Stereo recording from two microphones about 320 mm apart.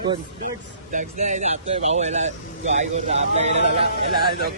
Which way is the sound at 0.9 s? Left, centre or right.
Right.